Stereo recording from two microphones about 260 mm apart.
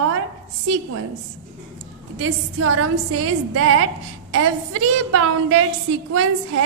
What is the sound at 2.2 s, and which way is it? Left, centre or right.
A woman's voice, right.